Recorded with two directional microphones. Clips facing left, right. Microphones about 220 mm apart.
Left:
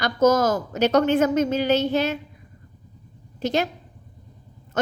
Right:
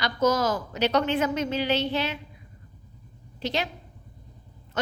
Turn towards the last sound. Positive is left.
turn(degrees=45)  # may be behind; listen again after turning